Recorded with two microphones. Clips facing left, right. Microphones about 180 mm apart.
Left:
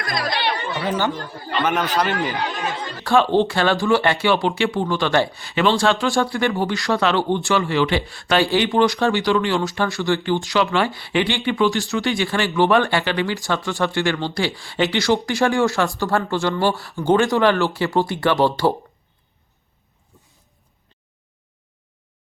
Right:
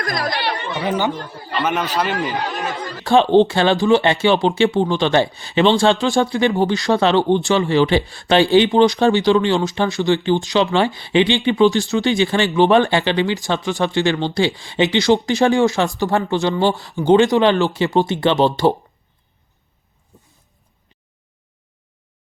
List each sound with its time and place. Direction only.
0.0 s speech: 45° right (ahead or behind)
0.8 s speech: 20° right (ahead or behind)
1.3 s speech: centre (ahead or behind)
3.0 s speech: 20° right (ahead or behind)